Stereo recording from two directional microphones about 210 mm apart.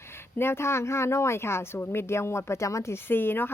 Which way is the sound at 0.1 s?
10° left (ahead or behind).